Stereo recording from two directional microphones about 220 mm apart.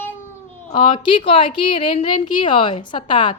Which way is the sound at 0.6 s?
20° left (ahead or behind).